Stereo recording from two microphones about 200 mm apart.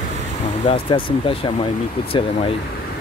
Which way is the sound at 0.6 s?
25° left (ahead or behind).